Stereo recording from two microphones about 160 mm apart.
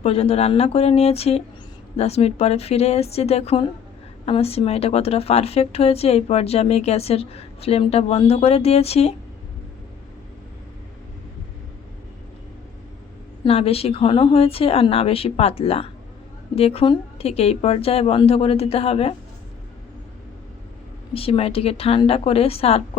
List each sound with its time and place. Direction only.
0.0 s a woman's voice: 40° left (ahead or behind)
13.4 s a woman's voice: 35° left (ahead or behind)
21.1 s a woman's voice: 35° left (ahead or behind)